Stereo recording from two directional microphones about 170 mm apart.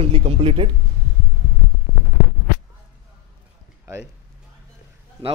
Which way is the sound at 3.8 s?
15° right (ahead or behind).